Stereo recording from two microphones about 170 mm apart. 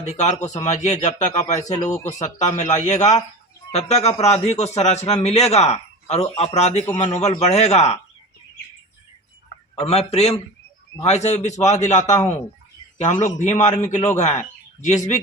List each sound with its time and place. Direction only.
0.0 s a man's voice: 40° left (ahead or behind)
9.8 s a man's voice: 40° left (ahead or behind)